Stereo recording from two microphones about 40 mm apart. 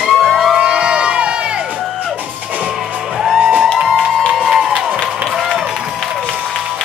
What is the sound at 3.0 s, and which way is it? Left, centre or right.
Music, centre.